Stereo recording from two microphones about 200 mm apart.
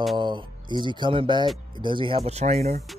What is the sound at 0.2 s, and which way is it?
Speech, 25° right (ahead or behind).